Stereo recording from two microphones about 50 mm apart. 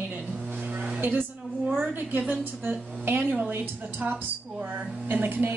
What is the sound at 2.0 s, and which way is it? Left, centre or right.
A woman's voice, right.